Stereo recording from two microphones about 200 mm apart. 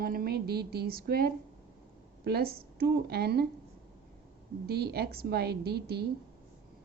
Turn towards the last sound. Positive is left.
turn(degrees=-55)  # may be behind; listen again after turning